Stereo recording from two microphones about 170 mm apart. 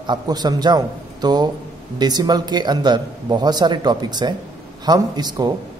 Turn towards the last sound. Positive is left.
turn(degrees=-25)  # may be behind; listen again after turning